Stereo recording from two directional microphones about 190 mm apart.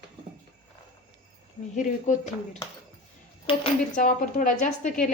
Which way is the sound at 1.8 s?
40° left (ahead or behind).